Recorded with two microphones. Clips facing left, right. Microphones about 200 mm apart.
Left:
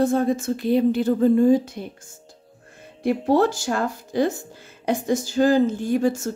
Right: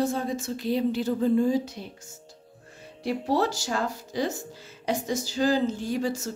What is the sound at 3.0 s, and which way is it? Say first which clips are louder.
A woman's voice: left 6 dB; 50° left (ahead or behind).